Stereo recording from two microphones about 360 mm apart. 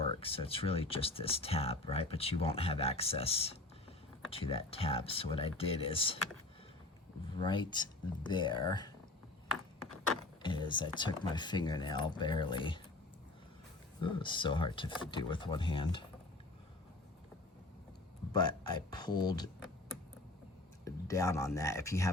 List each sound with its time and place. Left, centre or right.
0.1 s speech: centre
7.3 s speech: centre
10.4 s speech: centre
14.0 s speech: centre
18.3 s speech: centre
20.8 s speech: centre